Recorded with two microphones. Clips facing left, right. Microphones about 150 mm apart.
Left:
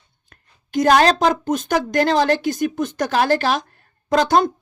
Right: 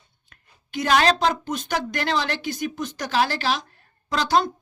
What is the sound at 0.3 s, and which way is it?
A woman's voice, 40° left (ahead or behind).